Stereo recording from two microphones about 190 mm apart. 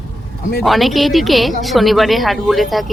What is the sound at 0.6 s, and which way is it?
Speech, centre (ahead or behind).